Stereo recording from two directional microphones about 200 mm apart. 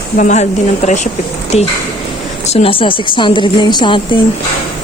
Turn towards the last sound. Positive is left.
turn(degrees=25)  # may be behind; listen again after turning